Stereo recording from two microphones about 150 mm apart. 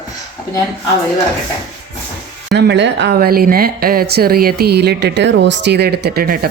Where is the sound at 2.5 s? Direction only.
90° right.